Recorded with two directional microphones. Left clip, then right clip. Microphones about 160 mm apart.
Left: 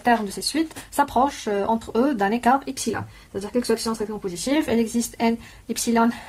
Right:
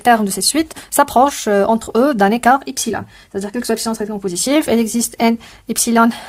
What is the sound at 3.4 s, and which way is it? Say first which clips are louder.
Speech: right 3 dB; 75° right (ahead or behind).